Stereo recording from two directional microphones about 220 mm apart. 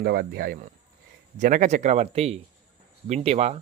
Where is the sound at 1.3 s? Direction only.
35° right (ahead or behind).